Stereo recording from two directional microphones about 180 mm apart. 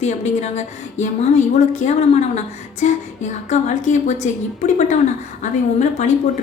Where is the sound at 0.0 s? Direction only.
40° left (ahead or behind).